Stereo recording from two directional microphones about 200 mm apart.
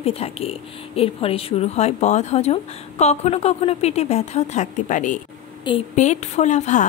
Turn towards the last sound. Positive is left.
turn(degrees=35)  # may be behind; listen again after turning